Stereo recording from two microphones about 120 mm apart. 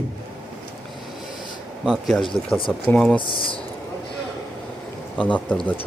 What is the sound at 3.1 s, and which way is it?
Speech, 45° left (ahead or behind).